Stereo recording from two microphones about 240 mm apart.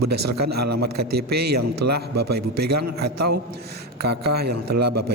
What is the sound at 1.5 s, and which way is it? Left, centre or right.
Speech, right.